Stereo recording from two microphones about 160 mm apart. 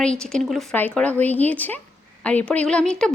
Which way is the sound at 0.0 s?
5° left (ahead or behind).